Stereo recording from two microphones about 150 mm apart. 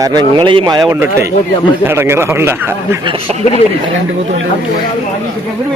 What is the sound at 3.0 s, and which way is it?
Speech, 35° right (ahead or behind).